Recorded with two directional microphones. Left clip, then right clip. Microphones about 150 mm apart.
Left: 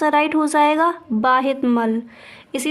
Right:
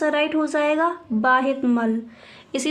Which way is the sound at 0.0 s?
40° left (ahead or behind).